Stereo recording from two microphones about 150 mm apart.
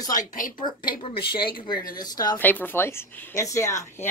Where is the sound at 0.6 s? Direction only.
30° left (ahead or behind).